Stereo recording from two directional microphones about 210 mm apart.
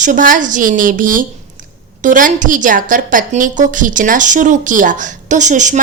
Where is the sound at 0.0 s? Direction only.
40° right (ahead or behind).